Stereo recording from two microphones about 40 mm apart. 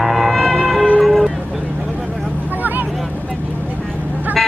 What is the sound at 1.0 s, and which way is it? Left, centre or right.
Vehicle, centre.